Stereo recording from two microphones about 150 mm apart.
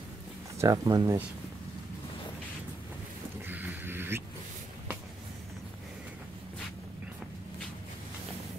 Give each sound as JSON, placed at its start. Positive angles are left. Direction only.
{"t": 0.6, "sound": "speech", "side_deg": -25}
{"t": 3.4, "sound": "boat", "side_deg": -10}